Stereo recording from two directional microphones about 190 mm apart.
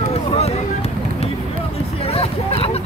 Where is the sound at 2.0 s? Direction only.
30° left (ahead or behind).